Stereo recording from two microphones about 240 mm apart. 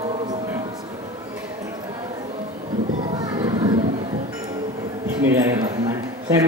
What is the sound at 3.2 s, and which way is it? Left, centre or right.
Children playing, centre.